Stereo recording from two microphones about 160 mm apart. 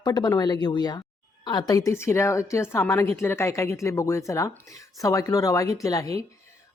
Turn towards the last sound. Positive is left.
turn(degrees=20)  # may be behind; listen again after turning